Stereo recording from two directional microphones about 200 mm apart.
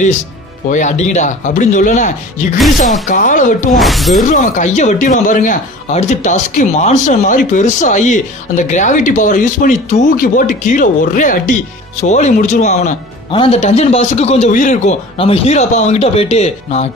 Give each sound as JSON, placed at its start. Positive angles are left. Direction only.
{"t": 0.7, "sound": "speech", "side_deg": 35}
{"t": 3.7, "sound": "speech", "side_deg": 0}
{"t": 4.3, "sound": "speech", "side_deg": 40}